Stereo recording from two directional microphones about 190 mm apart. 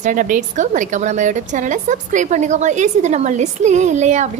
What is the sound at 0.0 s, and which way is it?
Speech, 45° right (ahead or behind).